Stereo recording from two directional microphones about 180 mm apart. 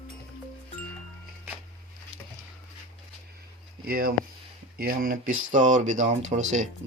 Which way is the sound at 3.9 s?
55° right (ahead or behind).